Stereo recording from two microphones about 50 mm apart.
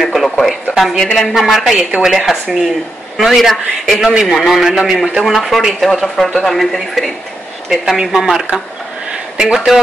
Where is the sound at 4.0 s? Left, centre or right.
Centre.